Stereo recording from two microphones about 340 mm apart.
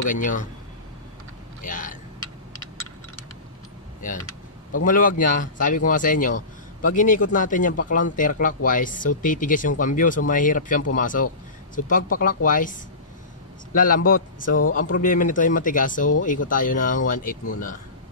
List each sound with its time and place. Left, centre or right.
0.1 s speech: left
1.6 s speech: left
4.8 s speech: left
13.7 s speech: left